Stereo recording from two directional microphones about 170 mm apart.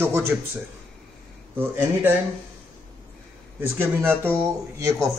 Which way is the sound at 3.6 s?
15° right (ahead or behind).